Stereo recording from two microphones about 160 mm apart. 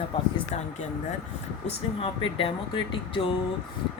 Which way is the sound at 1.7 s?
35° left (ahead or behind).